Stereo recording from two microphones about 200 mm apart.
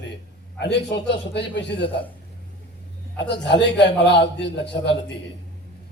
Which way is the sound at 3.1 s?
60° left (ahead or behind).